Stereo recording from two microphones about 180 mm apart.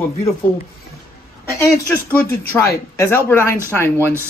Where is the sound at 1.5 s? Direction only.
10° left (ahead or behind).